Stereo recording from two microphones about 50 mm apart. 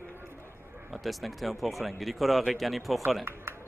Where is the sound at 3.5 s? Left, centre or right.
Right.